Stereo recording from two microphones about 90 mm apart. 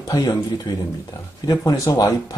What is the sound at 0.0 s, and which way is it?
Speech, 45° left (ahead or behind).